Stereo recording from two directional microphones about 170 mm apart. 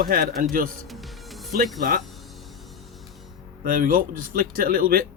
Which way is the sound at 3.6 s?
55° right (ahead or behind).